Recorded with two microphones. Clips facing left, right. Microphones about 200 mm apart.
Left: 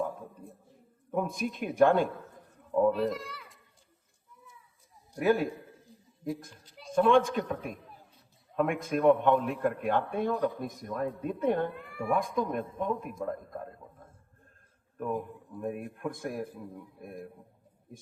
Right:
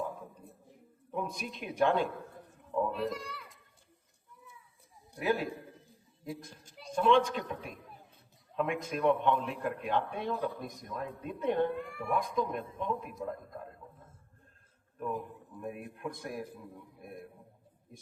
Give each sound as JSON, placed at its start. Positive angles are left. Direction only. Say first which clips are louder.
{"t": 1.1, "sound": "speech", "louder": "left 6 dB", "side_deg": 50}
{"t": 2.9, "sound": "a child's voice", "louder": "left 5 dB", "side_deg": 0}
{"t": 5.2, "sound": "speech", "louder": "left 5 dB", "side_deg": 50}
{"t": 6.9, "sound": "speech", "louder": "left 3 dB", "side_deg": 50}
{"t": 10.3, "sound": "speech", "louder": "left 5 dB", "side_deg": 15}
{"t": 10.6, "sound": "speech", "louder": "left 6 dB", "side_deg": 50}
{"t": 11.7, "sound": "speech", "louder": "right 2 dB", "side_deg": 0}
{"t": 12.1, "sound": "speech", "louder": "left 2 dB", "side_deg": 50}
{"t": 14.9, "sound": "speech", "louder": "left 4 dB", "side_deg": 50}